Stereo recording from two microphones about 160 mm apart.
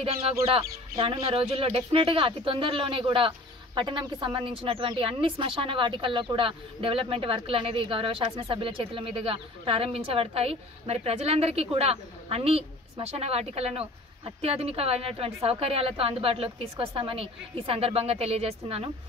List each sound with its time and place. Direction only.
0.0 s speech: 40° right (ahead or behind)